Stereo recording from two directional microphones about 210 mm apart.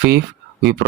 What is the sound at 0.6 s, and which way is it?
Speech, 55° right (ahead or behind).